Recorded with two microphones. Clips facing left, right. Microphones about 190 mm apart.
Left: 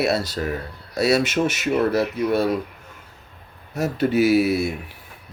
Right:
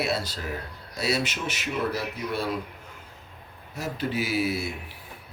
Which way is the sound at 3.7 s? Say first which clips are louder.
Left 9 dB; 65° left (ahead or behind).